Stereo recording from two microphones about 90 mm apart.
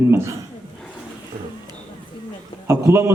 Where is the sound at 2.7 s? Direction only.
30° right (ahead or behind).